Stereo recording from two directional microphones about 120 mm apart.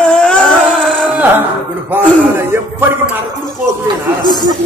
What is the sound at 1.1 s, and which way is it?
Music, 15° right (ahead or behind).